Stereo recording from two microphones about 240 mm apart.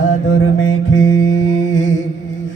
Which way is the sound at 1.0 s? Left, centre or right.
Centre.